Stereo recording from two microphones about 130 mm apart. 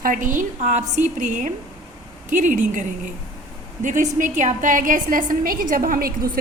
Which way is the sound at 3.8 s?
80° right.